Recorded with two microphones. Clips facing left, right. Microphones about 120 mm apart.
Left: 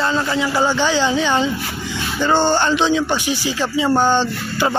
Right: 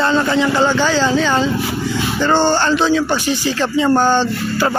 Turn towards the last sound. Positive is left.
turn(degrees=15)  # may be behind; listen again after turning